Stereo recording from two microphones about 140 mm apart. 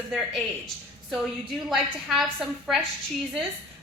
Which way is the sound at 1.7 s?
Centre (ahead or behind).